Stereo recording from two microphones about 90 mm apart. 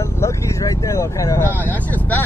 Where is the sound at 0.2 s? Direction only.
35° left (ahead or behind).